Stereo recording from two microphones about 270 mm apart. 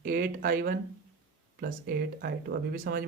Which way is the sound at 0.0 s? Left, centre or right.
Right.